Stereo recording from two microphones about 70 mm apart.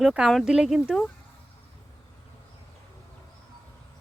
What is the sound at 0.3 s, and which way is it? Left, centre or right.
Speech, centre.